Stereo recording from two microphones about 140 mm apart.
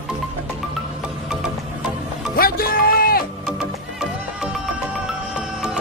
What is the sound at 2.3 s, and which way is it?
Music, 90° left.